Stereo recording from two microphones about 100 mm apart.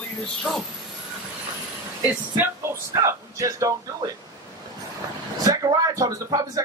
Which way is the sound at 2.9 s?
30° right (ahead or behind).